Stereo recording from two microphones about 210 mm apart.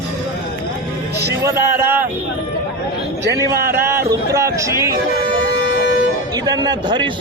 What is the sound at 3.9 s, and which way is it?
Speech, 15° right (ahead or behind).